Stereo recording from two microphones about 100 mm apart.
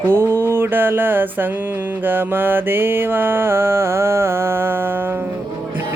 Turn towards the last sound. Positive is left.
turn(degrees=-20)  # may be behind; listen again after turning